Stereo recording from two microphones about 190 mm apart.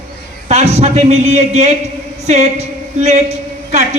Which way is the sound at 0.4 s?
35° right (ahead or behind).